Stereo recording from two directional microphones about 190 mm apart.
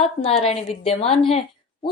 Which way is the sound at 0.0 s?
30° left (ahead or behind).